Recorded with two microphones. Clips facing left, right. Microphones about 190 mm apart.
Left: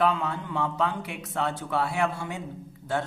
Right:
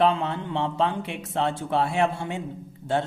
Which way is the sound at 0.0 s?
25° right (ahead or behind).